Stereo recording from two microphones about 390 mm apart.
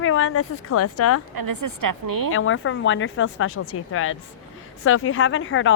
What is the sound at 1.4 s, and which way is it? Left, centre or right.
Speech, right.